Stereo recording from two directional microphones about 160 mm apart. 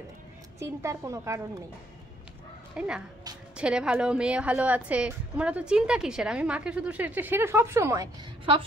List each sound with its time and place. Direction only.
0.6 s a woman's voice: 20° right (ahead or behind)
2.8 s a woman's voice: 5° right (ahead or behind)